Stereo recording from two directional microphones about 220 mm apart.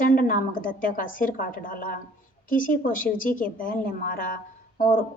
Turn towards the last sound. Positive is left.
turn(degrees=40)  # may be behind; listen again after turning